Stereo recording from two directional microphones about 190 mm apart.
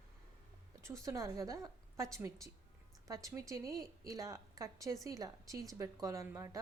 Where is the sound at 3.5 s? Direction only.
15° right (ahead or behind).